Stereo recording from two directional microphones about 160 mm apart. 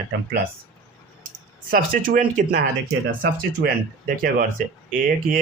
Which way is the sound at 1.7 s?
60° right (ahead or behind).